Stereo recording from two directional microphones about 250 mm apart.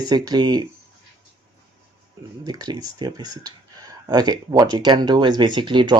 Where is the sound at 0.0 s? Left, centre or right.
Centre.